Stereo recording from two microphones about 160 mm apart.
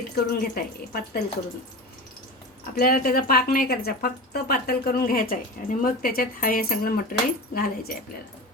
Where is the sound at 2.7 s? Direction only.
65° left (ahead or behind).